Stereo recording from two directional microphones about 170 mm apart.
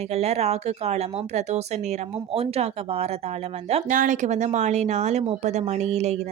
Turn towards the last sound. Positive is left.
turn(degrees=-40)  # may be behind; listen again after turning